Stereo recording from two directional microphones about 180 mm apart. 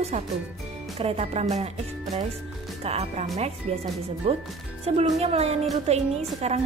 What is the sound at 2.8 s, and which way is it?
Speech, 35° right (ahead or behind).